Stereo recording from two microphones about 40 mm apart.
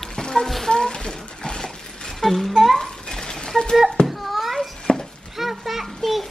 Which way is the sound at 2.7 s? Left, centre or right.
Centre.